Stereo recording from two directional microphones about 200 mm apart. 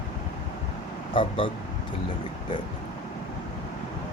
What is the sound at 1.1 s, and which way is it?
Speech, 25° left (ahead or behind).